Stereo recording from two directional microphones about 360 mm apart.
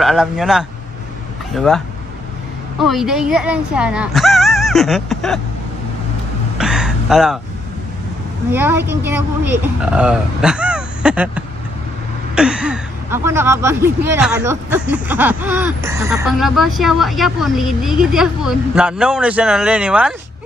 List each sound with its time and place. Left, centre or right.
0.0 s speech: centre
2.8 s speech: centre
6.6 s a sound: centre
8.5 s speech: centre